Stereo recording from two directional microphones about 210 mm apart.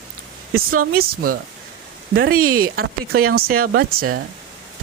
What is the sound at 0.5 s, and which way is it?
Speech, 45° right (ahead or behind).